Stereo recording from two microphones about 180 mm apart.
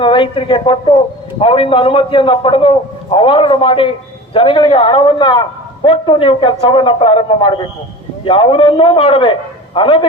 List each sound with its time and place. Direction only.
0.0 s a man's voice: 30° left (ahead or behind)